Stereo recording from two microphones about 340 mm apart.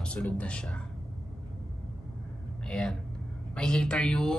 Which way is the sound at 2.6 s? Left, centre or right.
Centre.